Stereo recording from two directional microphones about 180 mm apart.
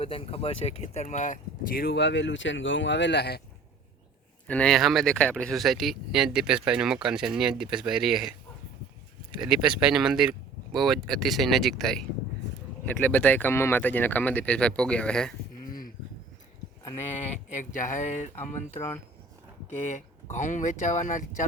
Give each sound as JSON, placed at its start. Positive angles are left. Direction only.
{"t": 0.0, "sound": "speech", "side_deg": 30}
{"t": 4.4, "sound": "speech", "side_deg": 5}
{"t": 9.4, "sound": "speech", "side_deg": -5}
{"t": 17.2, "sound": "speech", "side_deg": 40}
{"t": 20.3, "sound": "speech", "side_deg": 45}